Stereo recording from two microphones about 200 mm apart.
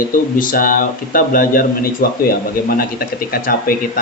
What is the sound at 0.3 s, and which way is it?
Speech, 45° left (ahead or behind).